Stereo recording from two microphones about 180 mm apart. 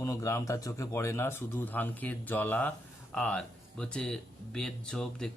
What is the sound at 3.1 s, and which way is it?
Speech, 5° left (ahead or behind).